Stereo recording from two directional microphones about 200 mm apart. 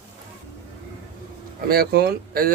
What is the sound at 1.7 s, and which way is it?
Speech, 50° right (ahead or behind).